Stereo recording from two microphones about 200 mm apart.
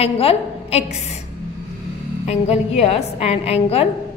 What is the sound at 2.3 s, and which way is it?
A woman's voice, 30° left (ahead or behind).